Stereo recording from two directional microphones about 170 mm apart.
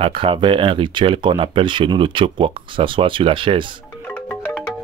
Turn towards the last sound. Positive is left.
turn(degrees=5)  # may be behind; listen again after turning